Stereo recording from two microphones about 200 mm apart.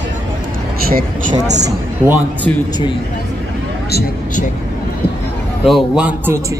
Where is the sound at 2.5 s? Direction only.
5° left (ahead or behind).